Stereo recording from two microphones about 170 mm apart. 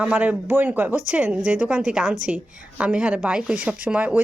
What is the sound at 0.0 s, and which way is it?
A woman's voice, 10° right (ahead or behind).